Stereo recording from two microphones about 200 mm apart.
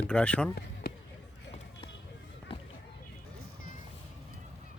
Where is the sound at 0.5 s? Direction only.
50° left (ahead or behind).